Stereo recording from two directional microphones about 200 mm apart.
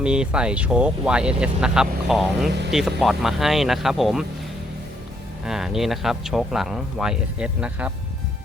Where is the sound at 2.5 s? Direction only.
60° right (ahead or behind).